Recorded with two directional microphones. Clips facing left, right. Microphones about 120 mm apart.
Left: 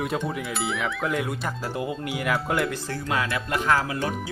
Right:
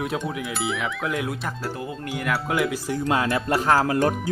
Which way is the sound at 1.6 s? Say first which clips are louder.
Left 1 dB; 15° left (ahead or behind).